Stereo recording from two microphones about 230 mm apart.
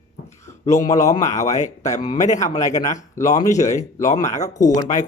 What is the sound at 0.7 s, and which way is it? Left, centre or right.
Speech, centre.